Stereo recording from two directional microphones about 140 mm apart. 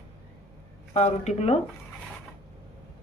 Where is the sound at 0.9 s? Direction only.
55° left (ahead or behind).